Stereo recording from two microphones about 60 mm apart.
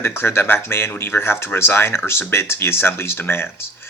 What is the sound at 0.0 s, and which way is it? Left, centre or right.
Speech, left.